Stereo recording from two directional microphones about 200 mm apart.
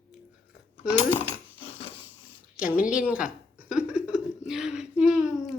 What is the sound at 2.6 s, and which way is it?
Speech, 5° right (ahead or behind).